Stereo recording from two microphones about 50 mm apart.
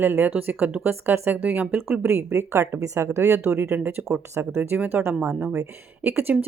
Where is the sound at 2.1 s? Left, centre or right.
Right.